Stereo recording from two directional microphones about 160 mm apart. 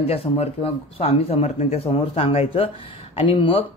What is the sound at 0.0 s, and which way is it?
Speech, 40° left (ahead or behind).